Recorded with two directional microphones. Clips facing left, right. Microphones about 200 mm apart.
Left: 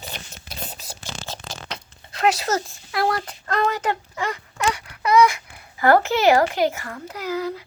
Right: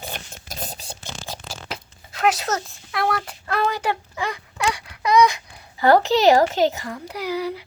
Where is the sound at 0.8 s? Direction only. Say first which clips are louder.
Even; 25° right (ahead or behind).